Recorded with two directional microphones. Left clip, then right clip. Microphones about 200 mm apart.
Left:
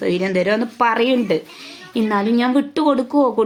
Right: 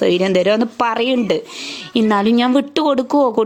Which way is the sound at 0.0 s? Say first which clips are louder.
Right 4 dB; 35° right (ahead or behind).